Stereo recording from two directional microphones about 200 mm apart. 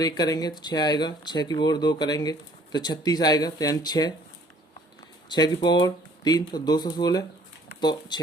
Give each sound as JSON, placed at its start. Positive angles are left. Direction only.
{"t": 0.0, "sound": "speech", "side_deg": 20}
{"t": 5.3, "sound": "speech", "side_deg": 20}